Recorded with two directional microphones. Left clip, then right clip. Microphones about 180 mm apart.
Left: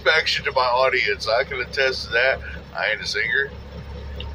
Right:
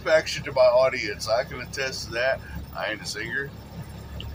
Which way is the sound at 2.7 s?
15° right (ahead or behind).